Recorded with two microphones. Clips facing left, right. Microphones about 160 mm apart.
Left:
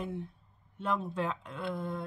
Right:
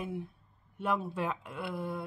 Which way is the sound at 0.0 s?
5° right (ahead or behind).